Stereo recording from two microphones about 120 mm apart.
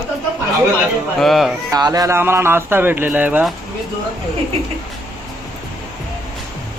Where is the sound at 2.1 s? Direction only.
20° right (ahead or behind).